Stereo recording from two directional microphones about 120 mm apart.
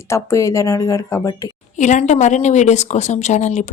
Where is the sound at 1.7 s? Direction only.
90° left.